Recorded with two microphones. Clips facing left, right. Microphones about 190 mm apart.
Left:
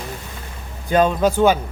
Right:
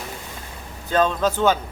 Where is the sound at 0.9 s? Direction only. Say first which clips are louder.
Left 4 dB; 15° left (ahead or behind).